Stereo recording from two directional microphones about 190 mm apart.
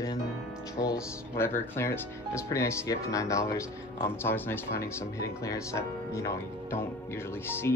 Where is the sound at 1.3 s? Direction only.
15° left (ahead or behind).